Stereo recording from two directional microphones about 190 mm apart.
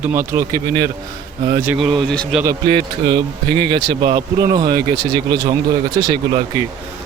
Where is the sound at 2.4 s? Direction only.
20° right (ahead or behind).